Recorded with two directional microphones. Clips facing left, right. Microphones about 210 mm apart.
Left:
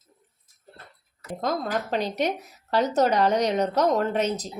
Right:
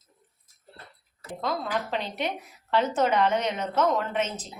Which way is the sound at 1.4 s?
40° left (ahead or behind).